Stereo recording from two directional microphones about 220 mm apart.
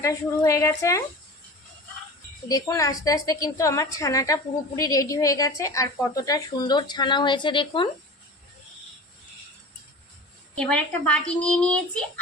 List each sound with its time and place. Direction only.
0.0 s a woman's voice: 15° left (ahead or behind)
2.5 s a woman's voice: 15° left (ahead or behind)
10.6 s speech: 5° left (ahead or behind)